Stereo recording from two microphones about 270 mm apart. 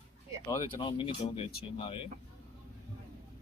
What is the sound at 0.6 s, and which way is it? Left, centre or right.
Speech, centre.